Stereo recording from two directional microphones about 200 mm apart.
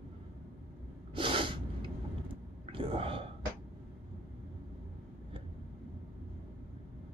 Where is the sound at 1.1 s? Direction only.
25° right (ahead or behind).